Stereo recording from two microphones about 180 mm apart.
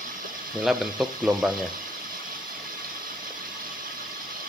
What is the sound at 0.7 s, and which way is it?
Speech, 5° right (ahead or behind).